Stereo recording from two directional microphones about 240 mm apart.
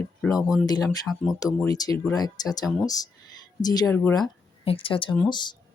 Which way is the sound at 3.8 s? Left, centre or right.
Centre.